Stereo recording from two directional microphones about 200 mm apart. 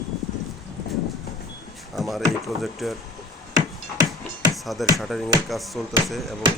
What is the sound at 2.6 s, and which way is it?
Speech, centre (ahead or behind).